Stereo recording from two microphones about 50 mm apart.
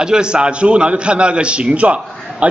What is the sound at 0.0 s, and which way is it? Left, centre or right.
A man's voice, centre.